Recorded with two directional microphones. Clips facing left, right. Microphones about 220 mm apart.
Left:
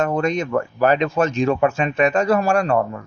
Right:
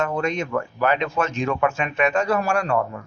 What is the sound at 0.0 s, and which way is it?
Speech, 40° left (ahead or behind).